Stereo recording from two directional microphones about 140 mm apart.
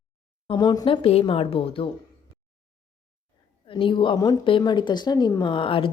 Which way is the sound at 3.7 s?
35° left (ahead or behind).